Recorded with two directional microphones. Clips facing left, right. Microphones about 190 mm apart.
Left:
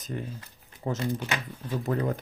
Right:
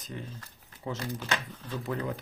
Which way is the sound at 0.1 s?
45° left (ahead or behind).